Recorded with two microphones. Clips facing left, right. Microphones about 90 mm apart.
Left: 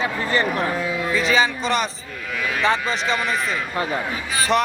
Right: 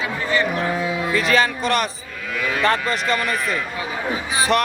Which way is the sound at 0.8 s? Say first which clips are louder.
Right 1 dB; 10° right (ahead or behind).